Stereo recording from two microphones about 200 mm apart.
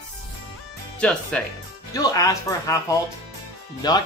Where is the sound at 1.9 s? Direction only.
15° left (ahead or behind).